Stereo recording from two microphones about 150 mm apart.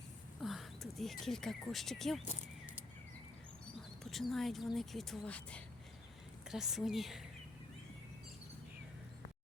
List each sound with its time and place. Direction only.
0.4 s speech: centre (ahead or behind)
2.2 s a sound: 55° left (ahead or behind)
4.0 s speech: centre (ahead or behind)
6.5 s speech: 5° right (ahead or behind)